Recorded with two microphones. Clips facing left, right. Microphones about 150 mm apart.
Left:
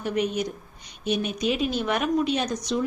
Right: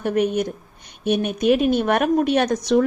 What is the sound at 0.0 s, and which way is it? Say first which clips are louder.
A woman's voice: right 6 dB; 55° right (ahead or behind).